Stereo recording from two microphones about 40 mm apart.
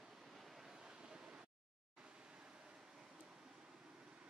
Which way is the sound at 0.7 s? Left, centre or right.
Centre.